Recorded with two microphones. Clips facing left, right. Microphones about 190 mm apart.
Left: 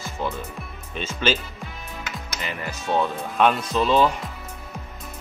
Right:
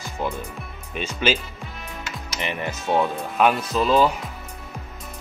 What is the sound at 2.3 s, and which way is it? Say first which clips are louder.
Speech: right 5 dB; 20° right (ahead or behind).